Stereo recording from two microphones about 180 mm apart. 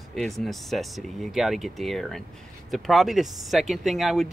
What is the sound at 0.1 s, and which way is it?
Speech, centre (ahead or behind).